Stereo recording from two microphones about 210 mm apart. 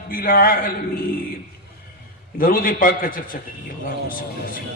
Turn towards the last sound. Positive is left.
turn(degrees=40)  # may be behind; listen again after turning